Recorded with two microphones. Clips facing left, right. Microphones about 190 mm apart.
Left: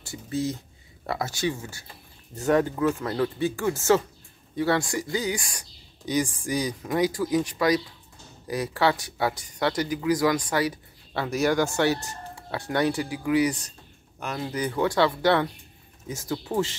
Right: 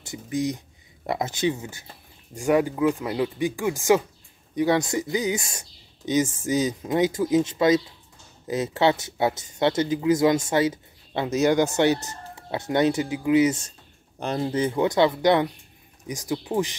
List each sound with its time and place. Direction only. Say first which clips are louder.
0.0 s speech: right 2 dB; 15° right (ahead or behind)